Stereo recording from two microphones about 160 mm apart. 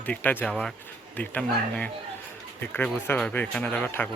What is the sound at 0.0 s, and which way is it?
Speech, 10° left (ahead or behind).